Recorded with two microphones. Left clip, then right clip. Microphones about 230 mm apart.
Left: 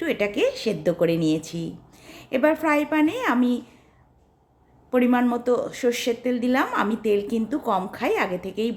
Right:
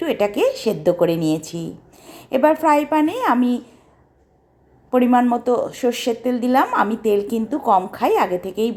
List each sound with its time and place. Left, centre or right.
0.0 s a woman's voice: centre
4.9 s a woman's voice: centre